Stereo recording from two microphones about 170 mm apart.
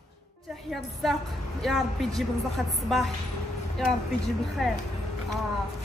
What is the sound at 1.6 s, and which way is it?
Speech, centre (ahead or behind).